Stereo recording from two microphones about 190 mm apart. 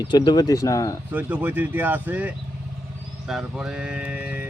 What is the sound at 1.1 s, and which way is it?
Speech, 10° right (ahead or behind).